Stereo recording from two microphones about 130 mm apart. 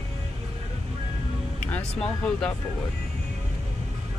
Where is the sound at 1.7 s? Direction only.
5° left (ahead or behind).